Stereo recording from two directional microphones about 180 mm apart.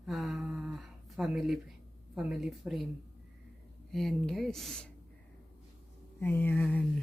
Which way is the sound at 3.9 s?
Centre (ahead or behind).